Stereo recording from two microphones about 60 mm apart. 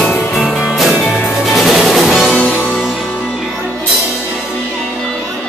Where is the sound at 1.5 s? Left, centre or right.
Centre.